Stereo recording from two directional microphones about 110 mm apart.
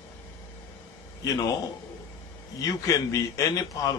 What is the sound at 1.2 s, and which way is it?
Speech, 35° left (ahead or behind).